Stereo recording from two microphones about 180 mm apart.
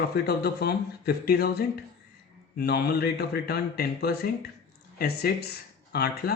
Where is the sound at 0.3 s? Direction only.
60° left (ahead or behind).